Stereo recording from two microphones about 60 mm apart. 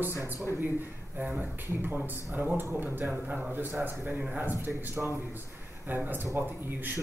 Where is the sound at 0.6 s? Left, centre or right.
Right.